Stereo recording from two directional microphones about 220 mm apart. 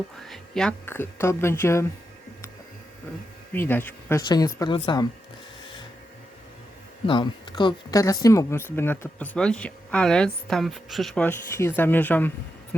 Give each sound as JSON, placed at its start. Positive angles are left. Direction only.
{"t": 0.2, "sound": "speech", "side_deg": 0}
{"t": 3.5, "sound": "speech", "side_deg": 10}
{"t": 7.1, "sound": "speech", "side_deg": 20}